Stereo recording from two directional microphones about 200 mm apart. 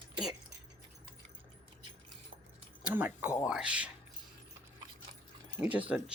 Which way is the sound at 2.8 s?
10° right (ahead or behind).